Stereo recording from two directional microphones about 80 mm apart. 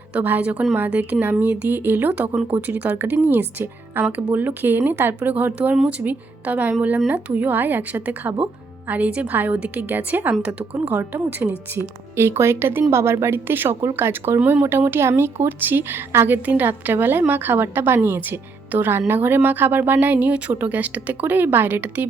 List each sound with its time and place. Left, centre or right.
0.1 s a woman's voice: right
5.7 s speech: centre
6.0 s a woman's voice: right